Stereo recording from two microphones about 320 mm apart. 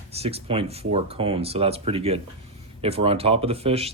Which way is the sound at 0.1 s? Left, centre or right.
Centre.